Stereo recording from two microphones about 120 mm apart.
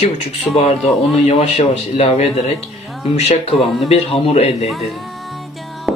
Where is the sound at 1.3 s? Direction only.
60° left (ahead or behind).